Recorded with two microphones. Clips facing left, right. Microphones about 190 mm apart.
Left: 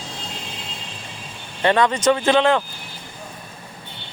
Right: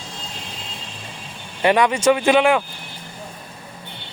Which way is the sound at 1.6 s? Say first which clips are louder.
Right 1 dB; 10° right (ahead or behind).